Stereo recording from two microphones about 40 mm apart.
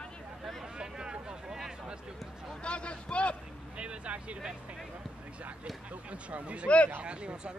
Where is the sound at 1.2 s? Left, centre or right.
Centre.